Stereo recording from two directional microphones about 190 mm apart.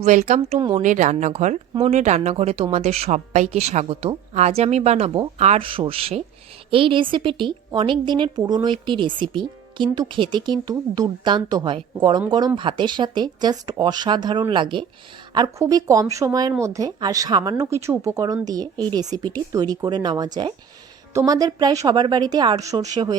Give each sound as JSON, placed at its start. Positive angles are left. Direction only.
{"t": 0.0, "sound": "a woman's voice", "side_deg": -40}